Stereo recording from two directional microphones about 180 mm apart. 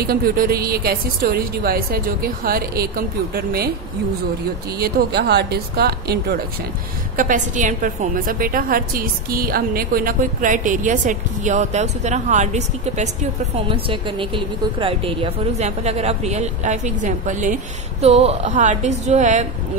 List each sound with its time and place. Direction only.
0.0 s a woman's voice: 55° right (ahead or behind)
4.7 s a woman's voice: 60° right (ahead or behind)
7.2 s a woman's voice: 45° right (ahead or behind)